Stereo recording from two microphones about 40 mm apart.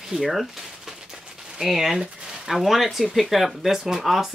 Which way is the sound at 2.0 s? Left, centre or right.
Centre.